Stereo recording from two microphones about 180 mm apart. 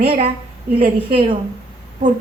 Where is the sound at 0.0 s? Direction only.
30° right (ahead or behind).